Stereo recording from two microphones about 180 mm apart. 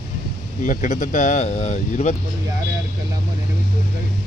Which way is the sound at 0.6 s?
45° left (ahead or behind).